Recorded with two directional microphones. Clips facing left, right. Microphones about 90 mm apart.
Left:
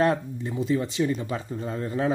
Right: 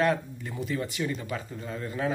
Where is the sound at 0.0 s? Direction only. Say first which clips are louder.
Left 3 dB; 30° left (ahead or behind).